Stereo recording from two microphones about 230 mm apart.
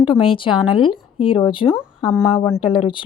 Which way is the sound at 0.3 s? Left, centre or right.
Left.